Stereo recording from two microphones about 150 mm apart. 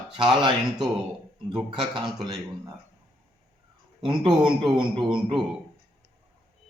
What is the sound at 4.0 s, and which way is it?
A man's voice, 35° right (ahead or behind).